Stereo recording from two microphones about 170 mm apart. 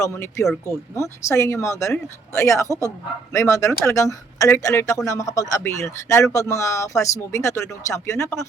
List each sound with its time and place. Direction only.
0.0 s speech: 15° left (ahead or behind)